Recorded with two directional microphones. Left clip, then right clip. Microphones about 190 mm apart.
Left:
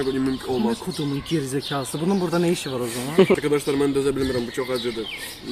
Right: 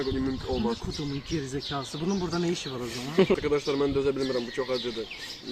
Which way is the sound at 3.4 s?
10° left (ahead or behind).